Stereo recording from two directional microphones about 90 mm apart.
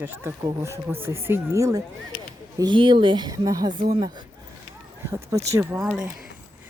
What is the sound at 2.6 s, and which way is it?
Speech, 60° right (ahead or behind).